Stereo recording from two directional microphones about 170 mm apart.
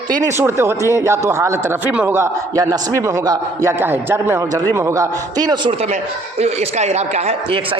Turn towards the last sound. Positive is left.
turn(degrees=-35)  # may be behind; listen again after turning